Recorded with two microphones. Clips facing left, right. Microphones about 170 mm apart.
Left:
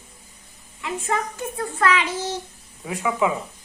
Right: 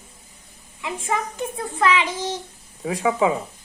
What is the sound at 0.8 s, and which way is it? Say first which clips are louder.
A woman's voice: even; 15° right (ahead or behind).